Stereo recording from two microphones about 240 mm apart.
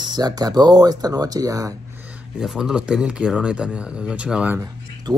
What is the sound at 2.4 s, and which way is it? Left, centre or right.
Speech, centre.